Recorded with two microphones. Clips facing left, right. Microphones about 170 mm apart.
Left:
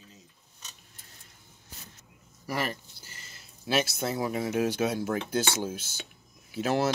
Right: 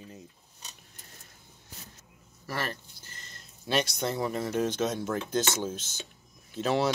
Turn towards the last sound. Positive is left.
turn(degrees=5)  # may be behind; listen again after turning